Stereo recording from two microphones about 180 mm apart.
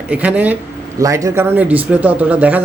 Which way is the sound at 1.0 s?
20° right (ahead or behind).